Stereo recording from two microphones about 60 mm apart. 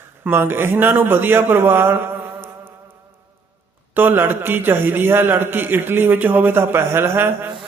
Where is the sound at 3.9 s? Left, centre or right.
Right.